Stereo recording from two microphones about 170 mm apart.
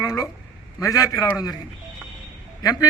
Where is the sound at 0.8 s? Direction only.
20° left (ahead or behind).